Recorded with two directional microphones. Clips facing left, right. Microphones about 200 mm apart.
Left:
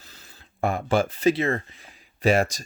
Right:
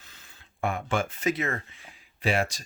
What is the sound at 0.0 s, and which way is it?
Speech, 35° left (ahead or behind).